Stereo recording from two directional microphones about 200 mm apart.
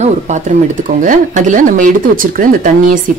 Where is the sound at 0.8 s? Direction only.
40° right (ahead or behind).